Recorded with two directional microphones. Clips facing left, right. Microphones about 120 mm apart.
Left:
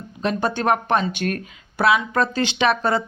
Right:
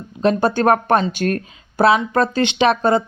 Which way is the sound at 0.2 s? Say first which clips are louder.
Right 6 dB; 35° right (ahead or behind).